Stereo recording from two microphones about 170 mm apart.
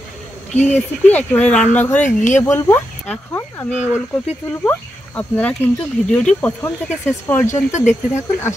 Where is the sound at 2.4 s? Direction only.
15° left (ahead or behind).